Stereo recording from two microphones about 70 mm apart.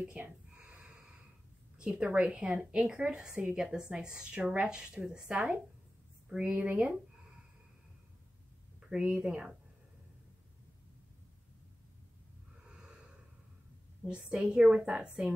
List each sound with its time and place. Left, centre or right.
0.2 s a sound: centre
1.8 s a woman's voice: centre
8.9 s a woman's voice: centre
14.0 s a woman's voice: centre